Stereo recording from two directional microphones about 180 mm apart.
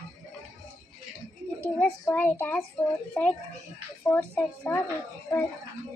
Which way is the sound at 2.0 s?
15° left (ahead or behind).